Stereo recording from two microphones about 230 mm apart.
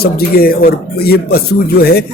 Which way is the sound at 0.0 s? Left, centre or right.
Left.